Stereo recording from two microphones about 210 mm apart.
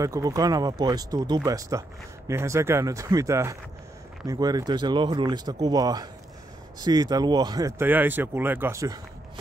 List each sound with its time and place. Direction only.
0.0 s speech: 15° right (ahead or behind)